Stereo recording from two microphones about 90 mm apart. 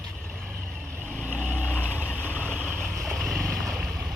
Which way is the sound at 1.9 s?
20° left (ahead or behind).